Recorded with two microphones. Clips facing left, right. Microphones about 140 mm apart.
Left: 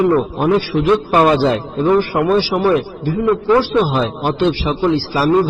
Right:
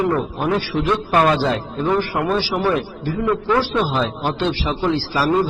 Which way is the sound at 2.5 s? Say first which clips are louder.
Left 5 dB; 30° left (ahead or behind).